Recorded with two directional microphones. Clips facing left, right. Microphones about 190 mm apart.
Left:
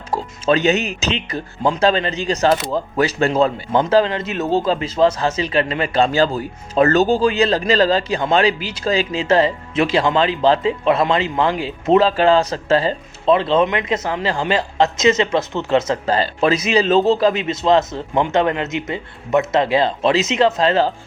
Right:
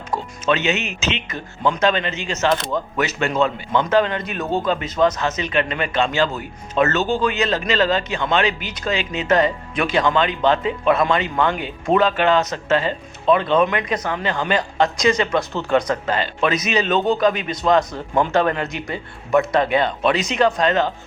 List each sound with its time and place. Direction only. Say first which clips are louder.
0.1 s a man's voice: left 4 dB; 35° left (ahead or behind)